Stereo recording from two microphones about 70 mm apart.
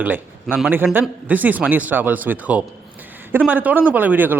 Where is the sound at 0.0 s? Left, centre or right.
Right.